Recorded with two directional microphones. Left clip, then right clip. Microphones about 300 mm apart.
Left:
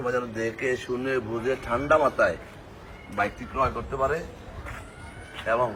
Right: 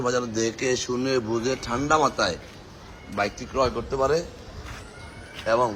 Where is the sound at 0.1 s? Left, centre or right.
Centre.